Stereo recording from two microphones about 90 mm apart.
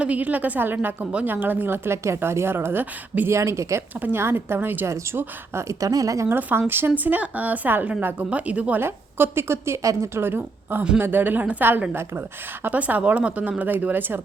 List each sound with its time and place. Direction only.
0.0 s a woman's voice: 15° right (ahead or behind); by 6.2 s 40° right (ahead or behind)
6.2 s a woman's voice: 25° right (ahead or behind)
8.8 s a woman's voice: 25° right (ahead or behind)